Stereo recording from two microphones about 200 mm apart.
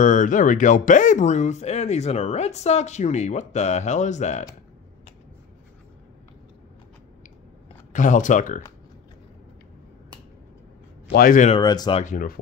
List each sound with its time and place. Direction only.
0.0 s speech: 40° left (ahead or behind)
7.9 s speech: 40° left (ahead or behind)
11.1 s speech: 45° left (ahead or behind)
11.5 s speech: 20° left (ahead or behind)
12.0 s speech: 40° left (ahead or behind)